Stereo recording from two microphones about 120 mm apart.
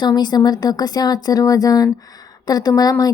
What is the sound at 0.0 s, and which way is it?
A woman's voice, 35° left (ahead or behind).